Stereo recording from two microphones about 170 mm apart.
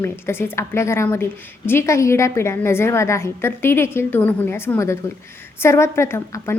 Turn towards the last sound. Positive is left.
turn(degrees=15)  # may be behind; listen again after turning